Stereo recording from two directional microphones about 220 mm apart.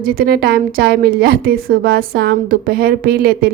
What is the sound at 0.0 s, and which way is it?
A woman's voice, 40° right (ahead or behind).